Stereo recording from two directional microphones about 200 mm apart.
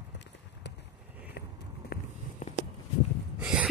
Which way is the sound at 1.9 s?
35° left (ahead or behind).